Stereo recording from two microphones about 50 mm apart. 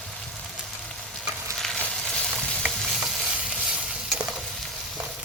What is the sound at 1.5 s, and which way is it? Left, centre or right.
Frying, centre.